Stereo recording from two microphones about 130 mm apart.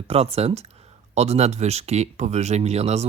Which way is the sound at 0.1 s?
55° right (ahead or behind).